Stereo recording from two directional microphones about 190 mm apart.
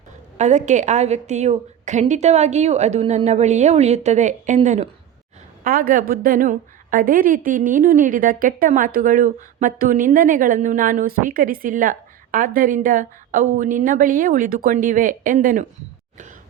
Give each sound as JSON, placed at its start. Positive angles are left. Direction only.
{"t": 0.3, "sound": "a woman's voice", "side_deg": -40}